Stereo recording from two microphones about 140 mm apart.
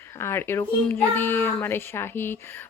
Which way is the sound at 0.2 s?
15° left (ahead or behind).